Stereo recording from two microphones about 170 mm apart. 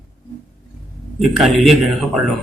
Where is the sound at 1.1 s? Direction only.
Centre (ahead or behind).